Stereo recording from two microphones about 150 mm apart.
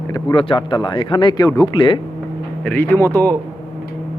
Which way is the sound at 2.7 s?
15° left (ahead or behind).